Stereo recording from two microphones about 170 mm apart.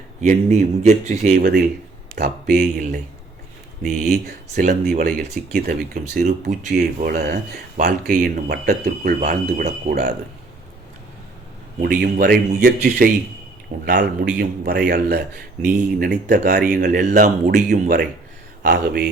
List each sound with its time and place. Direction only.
0.2 s speech: 45° right (ahead or behind)
1.4 s speech: 65° right (ahead or behind)
4.0 s speech: 55° right (ahead or behind)
6.7 s speech: 65° right (ahead or behind)
7.9 s speech: 55° right (ahead or behind)
11.8 s speech: 55° right (ahead or behind)
14.3 s speech: 70° right (ahead or behind); by 17.6 s 45° right (ahead or behind)
17.7 s speech: 65° right (ahead or behind)